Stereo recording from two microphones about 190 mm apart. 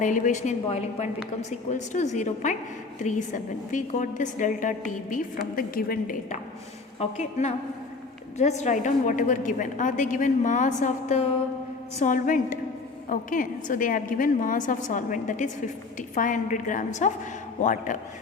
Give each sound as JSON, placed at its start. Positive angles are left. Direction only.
{"t": 0.0, "sound": "a woman's voice", "side_deg": 40}
{"t": 7.0, "sound": "a woman's voice", "side_deg": 40}